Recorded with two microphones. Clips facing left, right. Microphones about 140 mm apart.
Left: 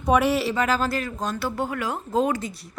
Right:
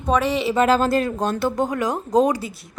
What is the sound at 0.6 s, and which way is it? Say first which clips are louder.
Speech: right 6 dB; 30° right (ahead or behind).